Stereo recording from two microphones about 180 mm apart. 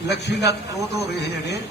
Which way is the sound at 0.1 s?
70° left (ahead or behind).